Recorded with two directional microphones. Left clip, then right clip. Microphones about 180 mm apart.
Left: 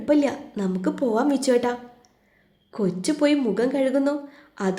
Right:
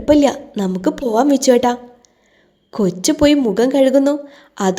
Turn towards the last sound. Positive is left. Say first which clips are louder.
# right 8 dB
turn(degrees=-30)  # may be behind; listen again after turning